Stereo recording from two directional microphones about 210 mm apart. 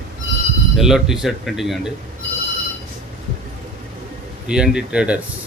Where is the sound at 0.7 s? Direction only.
Centre (ahead or behind).